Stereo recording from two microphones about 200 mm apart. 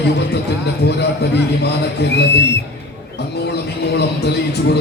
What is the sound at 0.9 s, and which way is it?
Speech, 55° left (ahead or behind).